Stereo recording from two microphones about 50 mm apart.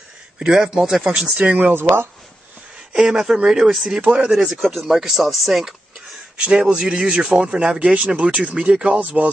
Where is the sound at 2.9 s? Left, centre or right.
Centre.